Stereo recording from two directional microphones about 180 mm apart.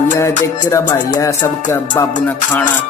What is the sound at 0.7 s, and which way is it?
Music, 20° left (ahead or behind).